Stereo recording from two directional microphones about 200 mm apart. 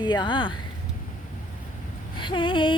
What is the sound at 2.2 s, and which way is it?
Speech, 25° left (ahead or behind).